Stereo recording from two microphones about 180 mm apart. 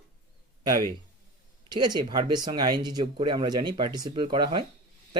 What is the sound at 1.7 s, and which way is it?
Speech, 25° right (ahead or behind).